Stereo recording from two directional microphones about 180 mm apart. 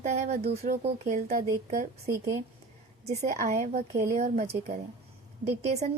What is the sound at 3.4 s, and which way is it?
Speech, 40° right (ahead or behind).